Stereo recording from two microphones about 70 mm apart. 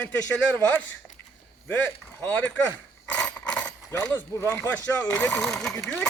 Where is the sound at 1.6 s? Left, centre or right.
Left.